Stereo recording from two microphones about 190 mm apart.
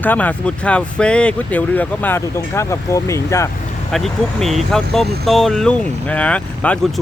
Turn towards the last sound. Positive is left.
turn(degrees=5)  # may be behind; listen again after turning